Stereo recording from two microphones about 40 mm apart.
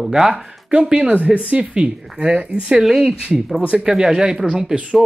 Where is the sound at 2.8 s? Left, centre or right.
Centre.